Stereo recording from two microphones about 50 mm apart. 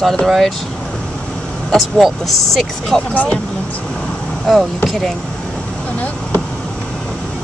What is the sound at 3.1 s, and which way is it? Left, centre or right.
Speech, left.